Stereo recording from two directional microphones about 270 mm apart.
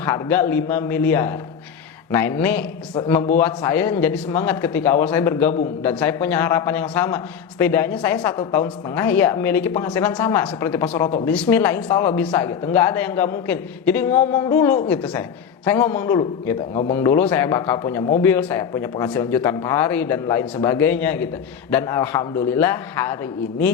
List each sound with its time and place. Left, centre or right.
0.0 s a man's voice: centre
8.3 s a man's voice: centre
9.0 s a man's voice: centre